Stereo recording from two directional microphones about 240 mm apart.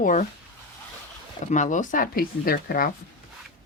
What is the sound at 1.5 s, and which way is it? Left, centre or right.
Speech, left.